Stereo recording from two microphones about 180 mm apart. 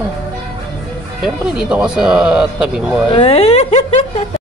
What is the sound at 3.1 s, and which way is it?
A woman's voice, 35° left (ahead or behind).